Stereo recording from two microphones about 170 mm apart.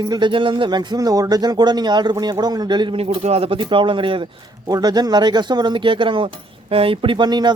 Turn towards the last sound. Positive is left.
turn(degrees=-25)  # may be behind; listen again after turning